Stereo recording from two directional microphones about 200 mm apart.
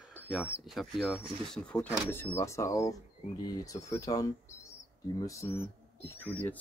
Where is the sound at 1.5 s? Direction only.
5° left (ahead or behind).